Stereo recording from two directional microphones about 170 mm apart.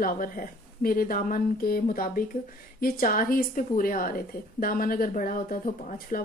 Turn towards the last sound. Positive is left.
turn(degrees=50)  # may be behind; listen again after turning